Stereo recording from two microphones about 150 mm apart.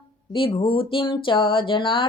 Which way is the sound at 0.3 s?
35° left (ahead or behind).